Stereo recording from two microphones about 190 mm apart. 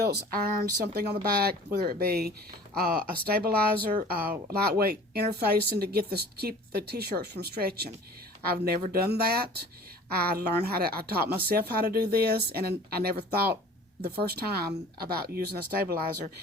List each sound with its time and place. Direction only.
0.1 s speech: 50° right (ahead or behind)